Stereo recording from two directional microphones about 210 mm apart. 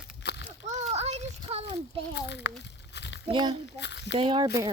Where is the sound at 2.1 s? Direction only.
55° left (ahead or behind).